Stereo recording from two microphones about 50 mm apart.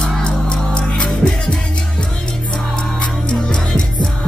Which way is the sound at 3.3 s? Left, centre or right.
Centre.